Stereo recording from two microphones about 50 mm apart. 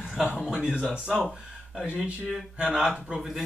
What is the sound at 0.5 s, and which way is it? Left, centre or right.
Speech, right.